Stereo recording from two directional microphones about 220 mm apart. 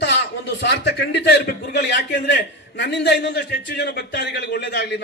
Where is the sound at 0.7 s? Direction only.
50° left (ahead or behind).